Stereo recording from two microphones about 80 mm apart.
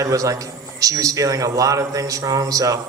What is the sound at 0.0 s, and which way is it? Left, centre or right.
A man's voice, right.